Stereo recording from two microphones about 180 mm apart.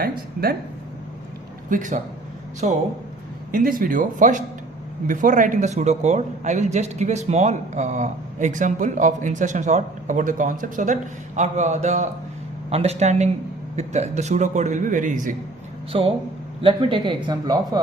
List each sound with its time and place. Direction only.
0.0 s speech: 55° right (ahead or behind)
1.7 s a man's voice: 45° right (ahead or behind)
15.9 s a man's voice: 30° right (ahead or behind)